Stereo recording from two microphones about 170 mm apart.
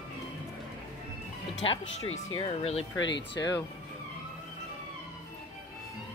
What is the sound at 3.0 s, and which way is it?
Speech, 90° left.